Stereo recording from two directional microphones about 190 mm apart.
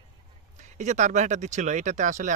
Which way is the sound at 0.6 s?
40° right (ahead or behind).